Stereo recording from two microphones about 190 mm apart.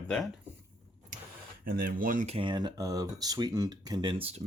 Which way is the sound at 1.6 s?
50° right (ahead or behind).